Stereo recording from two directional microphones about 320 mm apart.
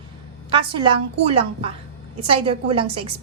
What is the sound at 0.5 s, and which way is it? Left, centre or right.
A woman's voice, centre.